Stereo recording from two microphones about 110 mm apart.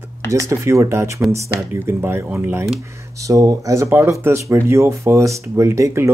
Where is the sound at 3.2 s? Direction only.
30° right (ahead or behind).